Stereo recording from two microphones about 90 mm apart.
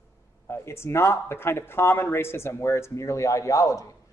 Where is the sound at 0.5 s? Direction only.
30° left (ahead or behind).